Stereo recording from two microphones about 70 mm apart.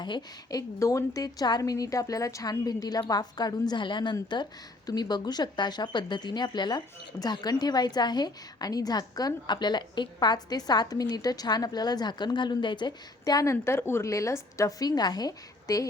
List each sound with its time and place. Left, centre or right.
0.0 s speech: left
0.8 s a woman's voice: left
13.4 s a woman's voice: left